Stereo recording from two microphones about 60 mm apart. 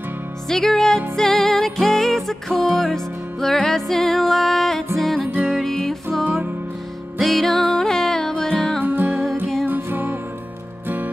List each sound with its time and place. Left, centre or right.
0.5 s music: centre
7.2 s music: centre
8.8 s music: right